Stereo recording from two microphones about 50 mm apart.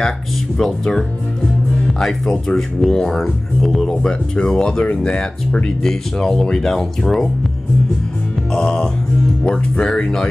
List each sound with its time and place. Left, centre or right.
0.6 s speech: centre
4.0 s speech: centre
5.8 s speech: centre
8.5 s speech: centre
9.4 s speech: left